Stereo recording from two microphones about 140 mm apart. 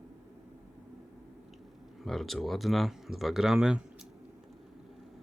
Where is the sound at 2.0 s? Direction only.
Centre (ahead or behind).